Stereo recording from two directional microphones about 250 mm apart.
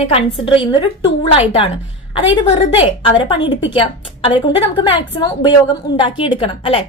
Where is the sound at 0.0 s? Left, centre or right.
Left.